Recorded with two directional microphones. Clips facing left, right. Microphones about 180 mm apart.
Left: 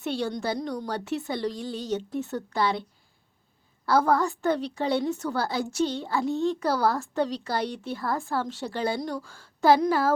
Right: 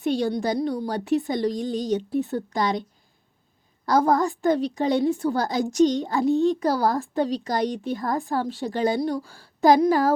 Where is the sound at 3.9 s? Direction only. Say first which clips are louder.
Right 2 dB; 15° right (ahead or behind).